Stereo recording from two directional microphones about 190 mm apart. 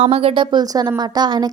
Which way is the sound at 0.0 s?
30° right (ahead or behind).